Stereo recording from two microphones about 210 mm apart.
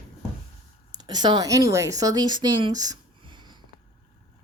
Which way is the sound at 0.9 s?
20° right (ahead or behind).